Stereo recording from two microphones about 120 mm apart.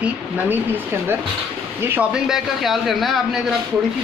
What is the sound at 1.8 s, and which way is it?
Speech, 20° right (ahead or behind).